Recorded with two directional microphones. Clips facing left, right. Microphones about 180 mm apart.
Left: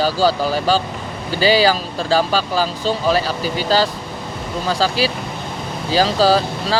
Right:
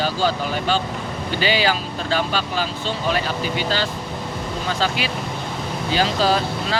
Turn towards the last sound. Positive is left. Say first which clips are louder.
# left 4 dB
turn(degrees=35)  # may be behind; listen again after turning